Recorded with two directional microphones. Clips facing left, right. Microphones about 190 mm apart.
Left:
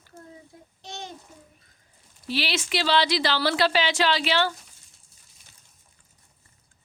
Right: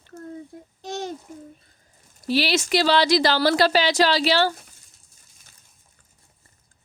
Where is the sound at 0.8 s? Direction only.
45° right (ahead or behind).